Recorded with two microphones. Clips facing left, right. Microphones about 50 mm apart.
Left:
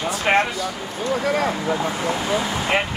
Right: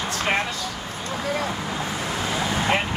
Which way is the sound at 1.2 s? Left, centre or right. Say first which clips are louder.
Left 4 dB; left.